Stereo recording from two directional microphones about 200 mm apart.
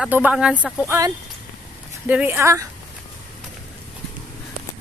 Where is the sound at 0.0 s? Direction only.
5° right (ahead or behind).